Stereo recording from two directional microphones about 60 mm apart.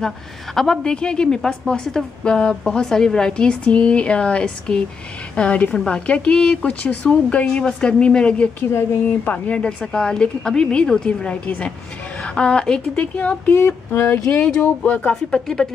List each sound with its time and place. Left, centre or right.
0.6 s a woman's voice: centre
8.5 s speech: left
9.5 s a woman's voice: centre
13.0 s speech: left
13.5 s speech: left
14.3 s speech: left
15.3 s a woman's voice: centre